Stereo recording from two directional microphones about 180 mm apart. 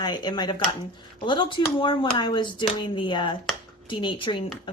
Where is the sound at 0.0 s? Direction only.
25° left (ahead or behind).